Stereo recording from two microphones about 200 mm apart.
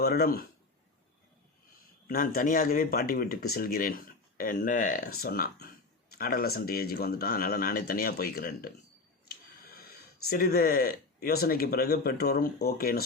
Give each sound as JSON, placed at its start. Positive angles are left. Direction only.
{"t": 0.0, "sound": "speech", "side_deg": 50}
{"t": 2.0, "sound": "speech", "side_deg": 45}
{"t": 10.2, "sound": "speech", "side_deg": 50}